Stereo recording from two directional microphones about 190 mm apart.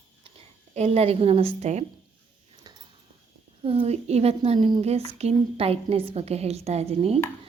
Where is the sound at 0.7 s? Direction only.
35° right (ahead or behind).